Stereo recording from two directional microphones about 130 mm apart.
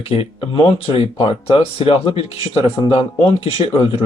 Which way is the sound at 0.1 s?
45° left (ahead or behind).